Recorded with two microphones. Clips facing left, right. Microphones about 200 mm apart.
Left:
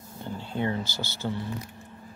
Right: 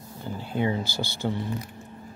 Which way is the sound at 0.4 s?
10° right (ahead or behind).